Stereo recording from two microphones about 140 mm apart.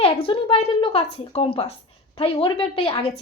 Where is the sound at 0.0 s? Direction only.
40° left (ahead or behind).